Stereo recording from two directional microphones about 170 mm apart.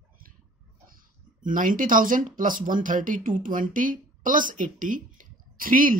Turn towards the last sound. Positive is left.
turn(degrees=-55)  # may be behind; listen again after turning